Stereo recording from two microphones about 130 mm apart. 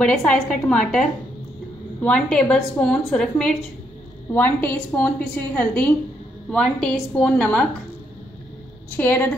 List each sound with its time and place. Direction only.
0.0 s a woman's voice: 5° left (ahead or behind)
8.9 s a woman's voice: 15° left (ahead or behind)